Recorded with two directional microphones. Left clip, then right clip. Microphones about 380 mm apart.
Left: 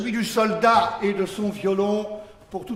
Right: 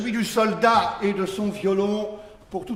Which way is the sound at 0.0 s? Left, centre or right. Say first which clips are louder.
Even; centre.